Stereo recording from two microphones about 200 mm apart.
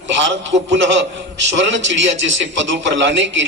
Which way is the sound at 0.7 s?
65° right (ahead or behind).